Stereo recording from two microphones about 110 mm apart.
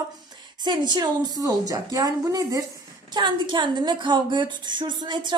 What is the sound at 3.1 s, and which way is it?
Speech, 45° right (ahead or behind).